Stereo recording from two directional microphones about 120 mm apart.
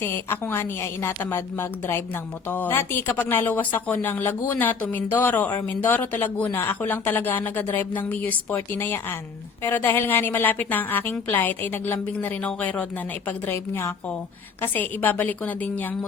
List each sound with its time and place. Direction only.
0.0 s a woman's voice: 20° left (ahead or behind)